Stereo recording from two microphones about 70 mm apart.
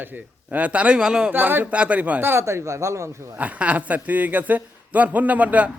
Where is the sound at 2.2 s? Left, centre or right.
Right.